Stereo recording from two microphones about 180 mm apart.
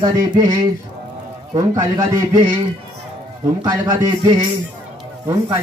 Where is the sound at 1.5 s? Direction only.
20° right (ahead or behind).